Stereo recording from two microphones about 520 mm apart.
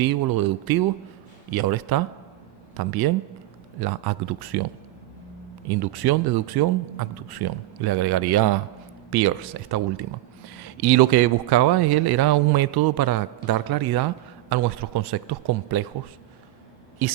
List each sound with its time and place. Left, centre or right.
0.0 s speech: right
5.6 s speech: right